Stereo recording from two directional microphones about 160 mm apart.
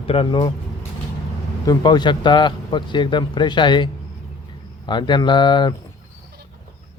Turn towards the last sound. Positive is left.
turn(degrees=30)  # may be behind; listen again after turning